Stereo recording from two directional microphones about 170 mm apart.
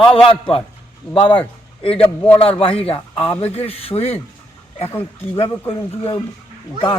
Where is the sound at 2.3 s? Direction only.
30° left (ahead or behind).